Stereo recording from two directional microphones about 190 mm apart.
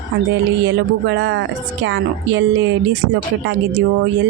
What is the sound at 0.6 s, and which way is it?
Speech, 70° right (ahead or behind).